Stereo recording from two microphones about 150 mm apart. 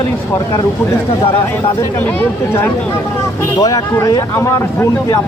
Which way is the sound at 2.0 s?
15° left (ahead or behind).